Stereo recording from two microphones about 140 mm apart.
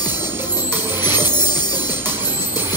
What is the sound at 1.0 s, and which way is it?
Music, 30° left (ahead or behind).